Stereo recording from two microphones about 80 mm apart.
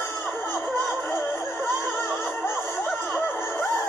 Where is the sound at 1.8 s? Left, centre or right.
Left.